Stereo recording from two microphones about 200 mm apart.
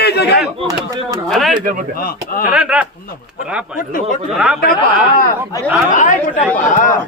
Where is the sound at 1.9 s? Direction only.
45° left (ahead or behind).